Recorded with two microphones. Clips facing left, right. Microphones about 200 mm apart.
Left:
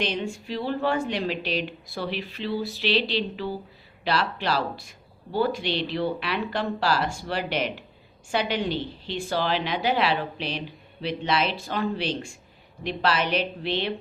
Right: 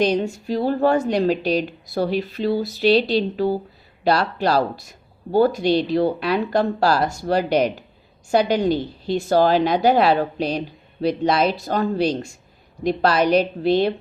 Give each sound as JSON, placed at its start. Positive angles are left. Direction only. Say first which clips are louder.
{"t": 0.0, "sound": "a woman's voice", "louder": "right 9 dB", "side_deg": -40}